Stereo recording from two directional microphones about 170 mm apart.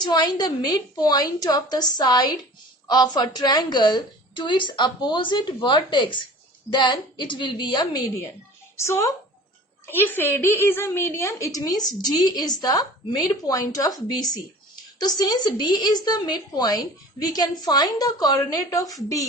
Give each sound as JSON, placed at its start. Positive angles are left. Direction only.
{"t": 0.0, "sound": "a woman's voice", "side_deg": 25}